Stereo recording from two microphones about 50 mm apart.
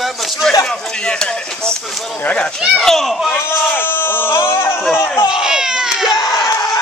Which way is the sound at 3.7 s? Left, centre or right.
Left.